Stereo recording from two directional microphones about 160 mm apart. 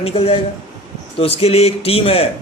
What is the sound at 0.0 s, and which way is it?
A man's voice, 35° left (ahead or behind).